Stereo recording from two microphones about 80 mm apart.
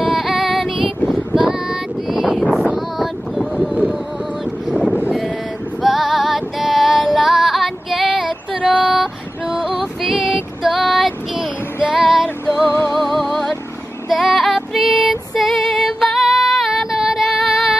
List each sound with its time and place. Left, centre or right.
0.0 s female singing: centre
1.4 s child singing: centre
2.5 s wind noise: centre
5.8 s music: centre
8.5 s a sound: centre
8.9 s female singing: centre
12.5 s music: left
12.8 s music: right
13.2 s music: centre
14.0 s female singing: centre